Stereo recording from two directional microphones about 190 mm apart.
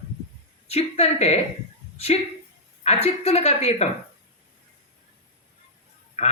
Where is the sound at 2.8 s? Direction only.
35° left (ahead or behind).